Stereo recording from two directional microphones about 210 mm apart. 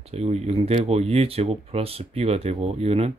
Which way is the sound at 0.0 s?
30° right (ahead or behind).